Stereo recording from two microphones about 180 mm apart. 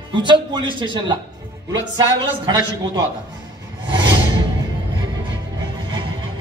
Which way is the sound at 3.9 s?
25° right (ahead or behind).